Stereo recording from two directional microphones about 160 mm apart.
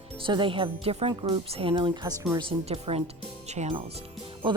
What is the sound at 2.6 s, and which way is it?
Speech, 40° right (ahead or behind).